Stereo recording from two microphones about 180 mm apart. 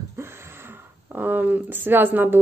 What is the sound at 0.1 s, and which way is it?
Speech, 15° right (ahead or behind).